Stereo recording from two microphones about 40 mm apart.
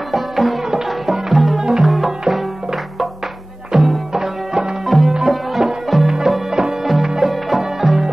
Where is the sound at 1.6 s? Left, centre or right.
Centre.